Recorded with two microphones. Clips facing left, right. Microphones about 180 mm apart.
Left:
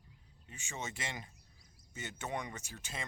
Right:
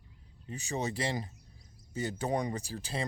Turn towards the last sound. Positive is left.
turn(degrees=-35)  # may be behind; listen again after turning